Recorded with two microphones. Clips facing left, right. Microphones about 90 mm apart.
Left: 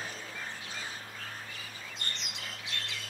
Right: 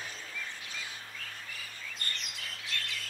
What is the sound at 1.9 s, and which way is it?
Bird, 20° left (ahead or behind).